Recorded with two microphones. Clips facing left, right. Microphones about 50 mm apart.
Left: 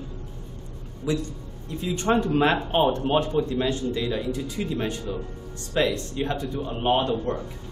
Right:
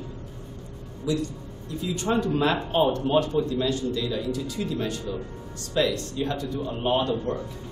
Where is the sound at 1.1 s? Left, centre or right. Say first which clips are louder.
Even; left.